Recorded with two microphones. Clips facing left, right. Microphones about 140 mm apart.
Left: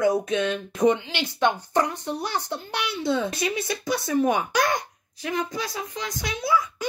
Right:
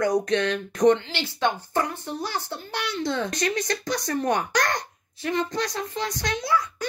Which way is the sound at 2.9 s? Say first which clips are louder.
Left 2 dB; 5° left (ahead or behind).